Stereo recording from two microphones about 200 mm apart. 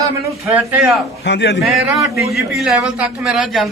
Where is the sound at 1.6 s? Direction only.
Centre (ahead or behind).